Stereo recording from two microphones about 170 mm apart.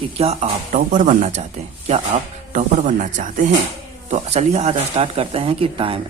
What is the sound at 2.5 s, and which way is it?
Speech, 45° right (ahead or behind).